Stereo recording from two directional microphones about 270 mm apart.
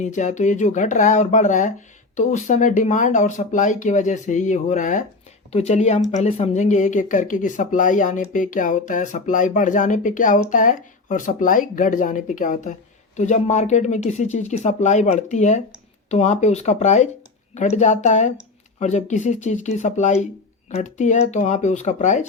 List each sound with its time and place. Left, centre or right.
0.0 s speech: left